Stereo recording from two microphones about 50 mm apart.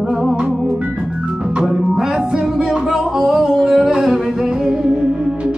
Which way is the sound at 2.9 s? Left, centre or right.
Centre.